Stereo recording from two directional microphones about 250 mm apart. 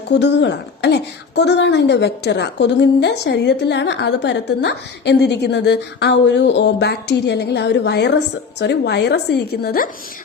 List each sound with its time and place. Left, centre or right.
0.1 s speech: left